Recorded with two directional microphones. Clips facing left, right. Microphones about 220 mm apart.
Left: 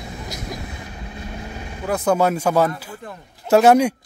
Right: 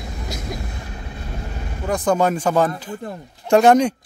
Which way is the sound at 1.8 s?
5° left (ahead or behind).